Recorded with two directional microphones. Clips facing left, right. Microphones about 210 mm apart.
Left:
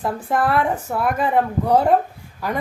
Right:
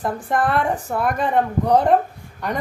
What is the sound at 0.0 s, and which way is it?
Speech, 5° left (ahead or behind).